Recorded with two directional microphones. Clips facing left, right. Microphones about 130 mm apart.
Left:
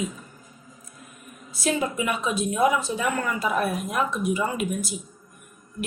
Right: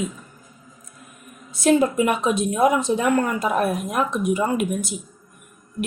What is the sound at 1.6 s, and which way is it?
Speech, 50° right (ahead or behind).